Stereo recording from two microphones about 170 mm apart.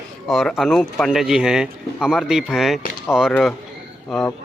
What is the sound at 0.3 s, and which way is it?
Speech, centre (ahead or behind).